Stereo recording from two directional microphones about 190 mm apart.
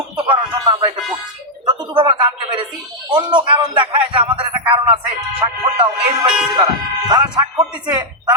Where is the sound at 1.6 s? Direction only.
25° right (ahead or behind).